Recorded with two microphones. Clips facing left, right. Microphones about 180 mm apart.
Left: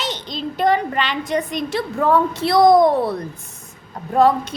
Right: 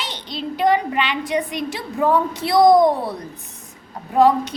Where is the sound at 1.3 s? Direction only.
10° right (ahead or behind).